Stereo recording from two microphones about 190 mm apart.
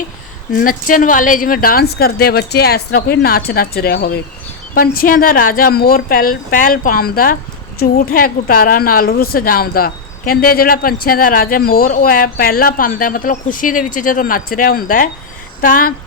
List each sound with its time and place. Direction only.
0.6 s a woman's voice: 45° left (ahead or behind)